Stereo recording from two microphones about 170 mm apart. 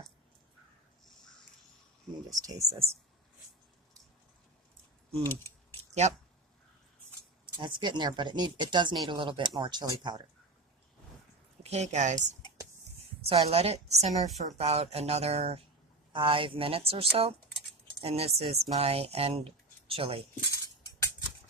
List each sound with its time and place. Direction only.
2.3 s speech: 20° right (ahead or behind)
5.2 s speech: 15° left (ahead or behind)
5.9 s speech: 40° right (ahead or behind)
7.5 s speech: 25° right (ahead or behind)
11.6 s speech: 40° right (ahead or behind)